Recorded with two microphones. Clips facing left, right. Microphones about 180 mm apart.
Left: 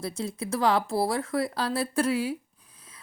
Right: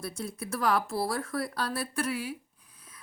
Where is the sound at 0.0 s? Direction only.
25° left (ahead or behind).